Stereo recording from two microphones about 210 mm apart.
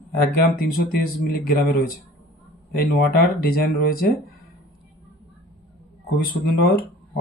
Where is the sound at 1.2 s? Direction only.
45° left (ahead or behind).